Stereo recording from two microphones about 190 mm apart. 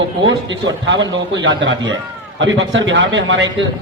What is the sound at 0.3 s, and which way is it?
A man's voice, 75° right (ahead or behind).